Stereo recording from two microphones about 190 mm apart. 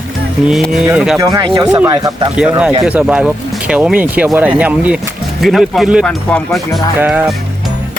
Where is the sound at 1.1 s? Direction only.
20° right (ahead or behind).